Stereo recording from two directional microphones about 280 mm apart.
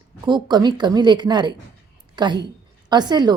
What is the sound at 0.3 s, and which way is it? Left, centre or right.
A woman's voice, centre.